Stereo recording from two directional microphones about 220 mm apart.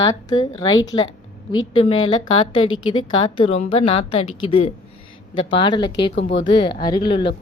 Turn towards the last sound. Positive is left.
turn(degrees=25)  # may be behind; listen again after turning